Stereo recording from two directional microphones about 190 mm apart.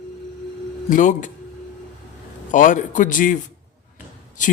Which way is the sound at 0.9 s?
45° left (ahead or behind).